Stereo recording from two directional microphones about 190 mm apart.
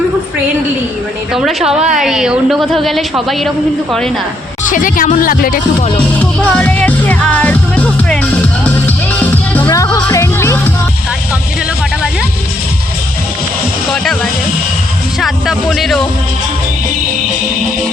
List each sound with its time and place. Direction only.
1.3 s a woman's voice: centre (ahead or behind)
4.7 s speech: 45° left (ahead or behind)
6.4 s music: 5° left (ahead or behind)
13.9 s music: 5° left (ahead or behind)
15.2 s a woman's voice: centre (ahead or behind)